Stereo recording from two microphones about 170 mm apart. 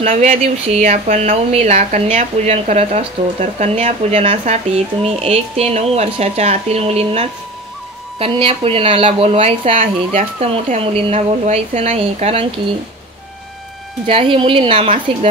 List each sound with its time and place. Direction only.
0.0 s speech: 45° right (ahead or behind)
14.0 s speech: 30° right (ahead or behind)